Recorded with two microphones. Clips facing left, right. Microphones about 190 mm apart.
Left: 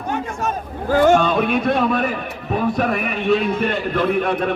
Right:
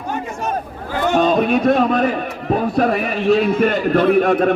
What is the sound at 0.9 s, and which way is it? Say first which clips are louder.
Speech: left 5 dB; 45° left (ahead or behind).